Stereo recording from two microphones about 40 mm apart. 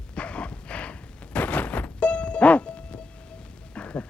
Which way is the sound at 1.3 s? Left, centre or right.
Left.